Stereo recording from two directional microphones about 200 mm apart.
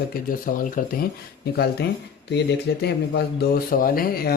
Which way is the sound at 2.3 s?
55° left (ahead or behind).